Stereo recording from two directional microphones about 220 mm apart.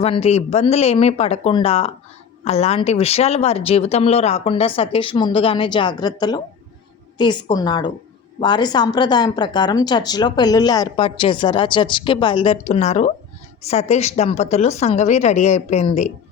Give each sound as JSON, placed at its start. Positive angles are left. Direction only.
{"t": 0.0, "sound": "speech", "side_deg": 30}